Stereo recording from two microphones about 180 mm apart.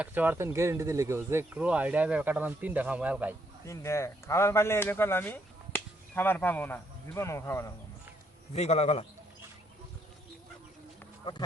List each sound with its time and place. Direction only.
0.0 s speech: 10° right (ahead or behind)
3.7 s speech: 15° left (ahead or behind)
8.5 s a man's voice: 35° left (ahead or behind)